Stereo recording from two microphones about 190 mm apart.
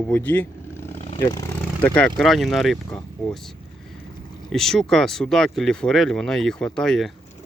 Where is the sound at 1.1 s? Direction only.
25° left (ahead or behind).